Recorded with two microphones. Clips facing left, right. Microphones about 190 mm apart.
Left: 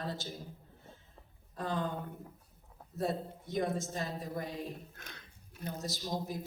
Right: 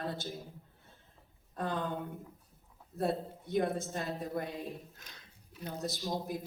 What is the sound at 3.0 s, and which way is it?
A man's voice, 55° right (ahead or behind).